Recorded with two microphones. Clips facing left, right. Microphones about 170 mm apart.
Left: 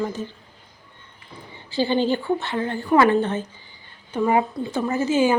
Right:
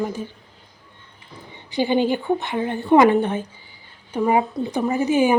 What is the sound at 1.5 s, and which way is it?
A woman's voice, 15° right (ahead or behind).